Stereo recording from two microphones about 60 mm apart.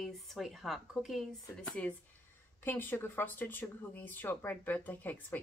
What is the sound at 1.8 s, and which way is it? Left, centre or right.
Speech, left.